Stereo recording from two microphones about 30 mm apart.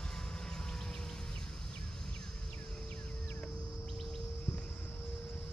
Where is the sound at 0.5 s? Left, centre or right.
Left.